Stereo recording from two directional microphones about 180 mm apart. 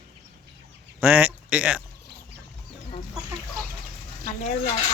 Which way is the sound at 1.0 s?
10° right (ahead or behind).